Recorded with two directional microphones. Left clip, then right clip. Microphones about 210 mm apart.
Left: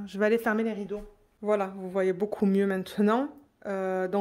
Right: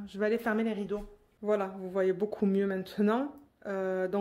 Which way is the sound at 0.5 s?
15° left (ahead or behind).